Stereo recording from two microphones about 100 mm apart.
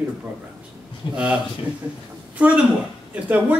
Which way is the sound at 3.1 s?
15° right (ahead or behind).